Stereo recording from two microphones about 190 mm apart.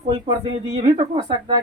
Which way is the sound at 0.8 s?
35° right (ahead or behind).